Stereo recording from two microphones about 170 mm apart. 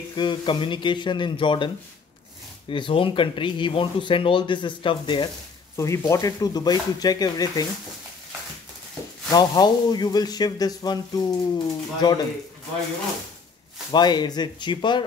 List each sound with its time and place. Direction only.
0.1 s speech: 25° left (ahead or behind)
2.7 s speech: 30° left (ahead or behind)
5.8 s speech: 15° left (ahead or behind)
9.3 s speech: 25° left (ahead or behind)
13.9 s speech: 25° left (ahead or behind)